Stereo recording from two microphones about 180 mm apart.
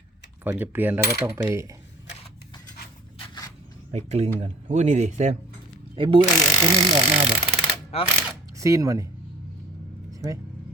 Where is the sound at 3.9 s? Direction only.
40° right (ahead or behind).